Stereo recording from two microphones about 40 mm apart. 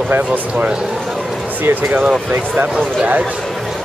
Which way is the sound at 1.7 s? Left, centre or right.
Right.